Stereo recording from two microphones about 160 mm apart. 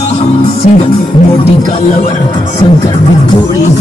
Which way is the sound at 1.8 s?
50° left (ahead or behind).